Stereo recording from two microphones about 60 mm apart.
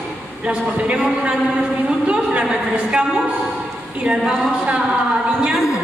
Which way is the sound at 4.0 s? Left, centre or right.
Centre.